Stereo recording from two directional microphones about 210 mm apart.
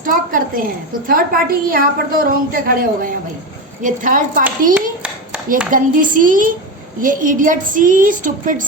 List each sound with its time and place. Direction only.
0.0 s a woman's voice: 40° right (ahead or behind)
4.7 s a sound: 5° right (ahead or behind)
5.7 s a woman's voice: 40° right (ahead or behind)